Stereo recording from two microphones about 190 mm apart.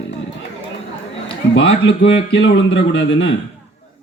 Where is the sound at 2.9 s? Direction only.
70° left (ahead or behind).